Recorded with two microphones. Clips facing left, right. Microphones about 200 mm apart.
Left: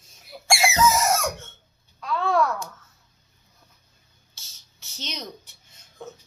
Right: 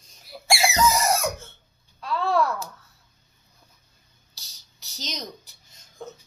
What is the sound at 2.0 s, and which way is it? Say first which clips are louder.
Speech: left 1 dB; centre (ahead or behind).